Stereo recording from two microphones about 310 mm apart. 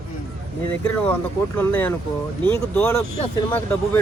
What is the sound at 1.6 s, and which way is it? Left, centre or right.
Speech, centre.